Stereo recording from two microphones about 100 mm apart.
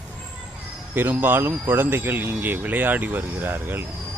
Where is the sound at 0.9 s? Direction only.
20° right (ahead or behind).